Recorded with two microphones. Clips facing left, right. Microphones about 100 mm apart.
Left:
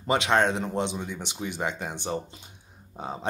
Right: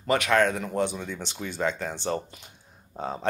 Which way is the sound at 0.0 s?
20° left (ahead or behind).